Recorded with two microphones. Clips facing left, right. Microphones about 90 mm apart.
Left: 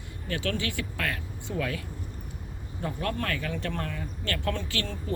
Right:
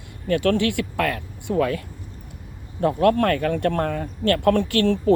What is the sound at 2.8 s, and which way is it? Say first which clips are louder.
Speech: right 13 dB; 60° right (ahead or behind).